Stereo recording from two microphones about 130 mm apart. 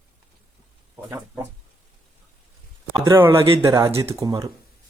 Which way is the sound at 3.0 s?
35° right (ahead or behind).